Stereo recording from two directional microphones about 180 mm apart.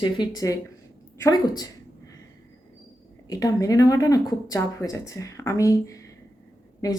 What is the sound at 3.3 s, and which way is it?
Speech, 20° left (ahead or behind).